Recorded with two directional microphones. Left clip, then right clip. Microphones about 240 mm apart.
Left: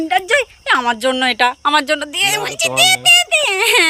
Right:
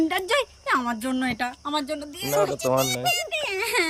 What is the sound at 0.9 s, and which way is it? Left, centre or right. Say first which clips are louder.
Speech: left 12 dB; centre.